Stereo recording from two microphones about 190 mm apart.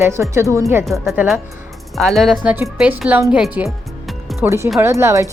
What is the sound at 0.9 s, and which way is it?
Speech, 5° right (ahead or behind).